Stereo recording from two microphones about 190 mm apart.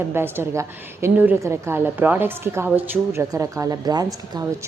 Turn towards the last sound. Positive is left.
turn(degrees=-20)  # may be behind; listen again after turning